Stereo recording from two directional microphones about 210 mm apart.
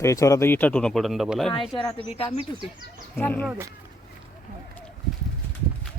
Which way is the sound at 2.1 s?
25° left (ahead or behind).